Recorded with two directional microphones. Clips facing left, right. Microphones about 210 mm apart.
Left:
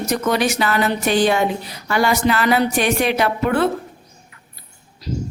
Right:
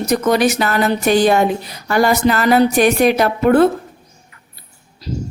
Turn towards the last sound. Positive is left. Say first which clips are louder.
# right 6 dB
turn(degrees=-40)  # may be behind; listen again after turning